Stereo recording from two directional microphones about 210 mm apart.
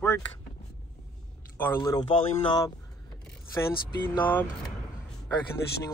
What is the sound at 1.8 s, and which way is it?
Speech, 20° left (ahead or behind).